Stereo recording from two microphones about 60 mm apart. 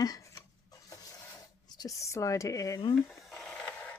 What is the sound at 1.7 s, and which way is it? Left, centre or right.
Speech, left.